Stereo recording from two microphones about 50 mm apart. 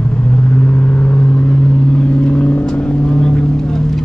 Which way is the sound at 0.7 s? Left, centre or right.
Left.